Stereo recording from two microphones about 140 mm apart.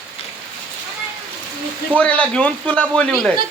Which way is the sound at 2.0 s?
10° left (ahead or behind).